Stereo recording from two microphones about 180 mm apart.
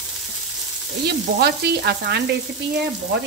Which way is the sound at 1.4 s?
65° right (ahead or behind).